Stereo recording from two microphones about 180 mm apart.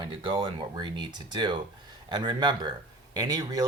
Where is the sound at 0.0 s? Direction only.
30° right (ahead or behind).